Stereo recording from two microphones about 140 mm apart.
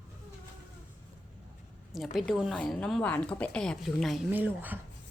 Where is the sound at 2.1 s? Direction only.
Centre (ahead or behind).